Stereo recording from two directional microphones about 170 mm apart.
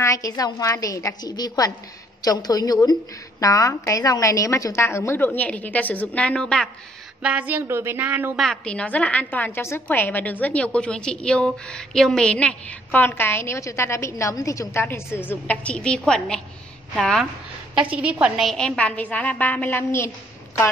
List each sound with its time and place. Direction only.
0.0 s a woman's voice: 20° left (ahead or behind); by 6.7 s 5° left (ahead or behind)
7.2 s speech: 10° right (ahead or behind)
8.5 s a woman's voice: 5° left (ahead or behind)